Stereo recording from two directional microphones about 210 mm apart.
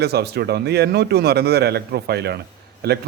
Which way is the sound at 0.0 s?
50° right (ahead or behind).